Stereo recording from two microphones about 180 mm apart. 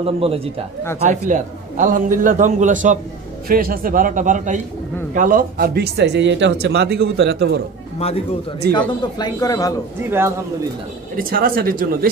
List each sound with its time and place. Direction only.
0.0 s a man's voice: 30° right (ahead or behind)
1.0 s a man's voice: 45° right (ahead or behind); by 7.6 s 70° right (ahead or behind)
8.7 s speech: 20° left (ahead or behind)
11.1 s a man's voice: 55° right (ahead or behind)